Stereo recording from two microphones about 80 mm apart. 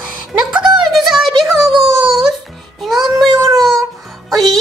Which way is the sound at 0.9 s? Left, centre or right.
Centre.